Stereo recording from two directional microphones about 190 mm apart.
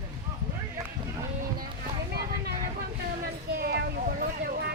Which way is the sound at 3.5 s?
55° right (ahead or behind).